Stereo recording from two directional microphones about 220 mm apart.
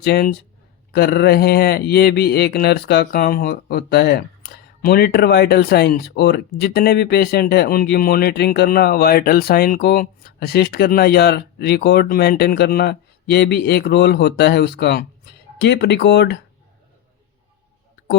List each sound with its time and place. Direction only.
0.0 s speech: 45° left (ahead or behind)